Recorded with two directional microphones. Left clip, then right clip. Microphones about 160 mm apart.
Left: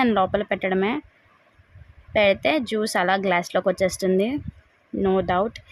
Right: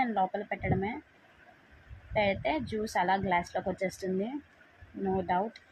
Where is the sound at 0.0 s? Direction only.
70° left (ahead or behind).